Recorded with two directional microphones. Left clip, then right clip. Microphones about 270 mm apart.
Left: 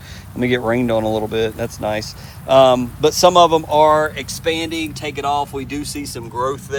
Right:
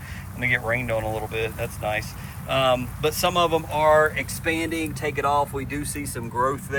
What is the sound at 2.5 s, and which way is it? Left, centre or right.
Speech, centre.